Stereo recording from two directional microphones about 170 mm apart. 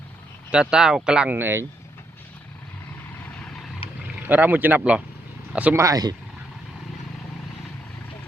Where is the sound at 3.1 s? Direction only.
10° left (ahead or behind).